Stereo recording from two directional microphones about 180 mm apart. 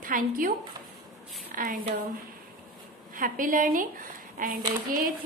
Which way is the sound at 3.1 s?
50° right (ahead or behind).